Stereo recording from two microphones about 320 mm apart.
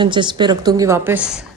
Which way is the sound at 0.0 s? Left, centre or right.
Centre.